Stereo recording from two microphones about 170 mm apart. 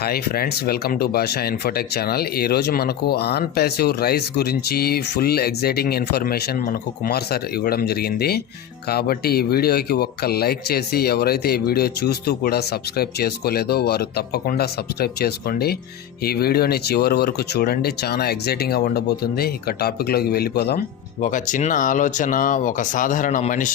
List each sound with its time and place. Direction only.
0.0 s speech: 65° left (ahead or behind)
21.2 s speech: 50° left (ahead or behind)